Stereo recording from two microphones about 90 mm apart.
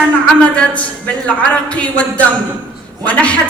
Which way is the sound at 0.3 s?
15° left (ahead or behind).